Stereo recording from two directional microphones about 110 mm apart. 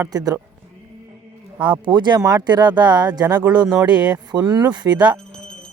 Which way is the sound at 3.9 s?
10° right (ahead or behind).